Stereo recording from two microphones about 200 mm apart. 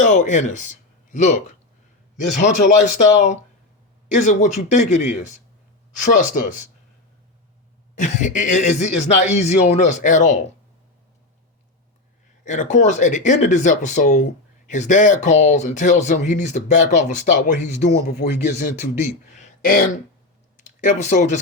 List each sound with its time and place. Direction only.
0.0 s speech: 40° left (ahead or behind)
7.9 s speech: 40° left (ahead or behind)
12.5 s speech: 35° left (ahead or behind)
17.8 s speech: 55° left (ahead or behind)
19.3 s a sound: 35° left (ahead or behind)
20.6 s speech: 35° left (ahead or behind)